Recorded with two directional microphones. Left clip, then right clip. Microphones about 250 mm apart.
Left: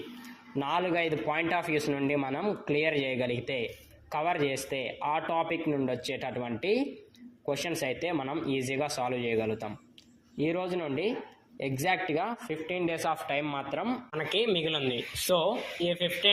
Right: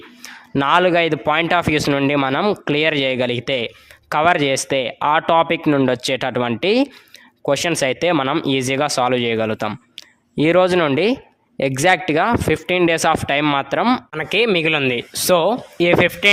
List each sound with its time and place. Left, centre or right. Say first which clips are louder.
0.5 s a man's voice: right 15 dB; right